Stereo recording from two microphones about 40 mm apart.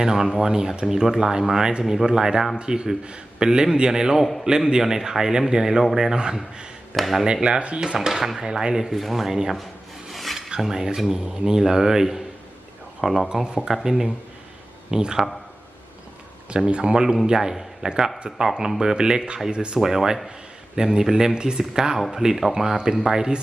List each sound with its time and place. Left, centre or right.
0.0 s speech: centre
4.2 s speech: centre
4.4 s speech: centre
6.9 s speech: centre
7.6 s speech: right
8.0 s speech: centre
8.9 s speech: centre
10.1 s filing: centre
10.6 s a man's voice: centre
16.8 s speech: centre
19.8 s speech: centre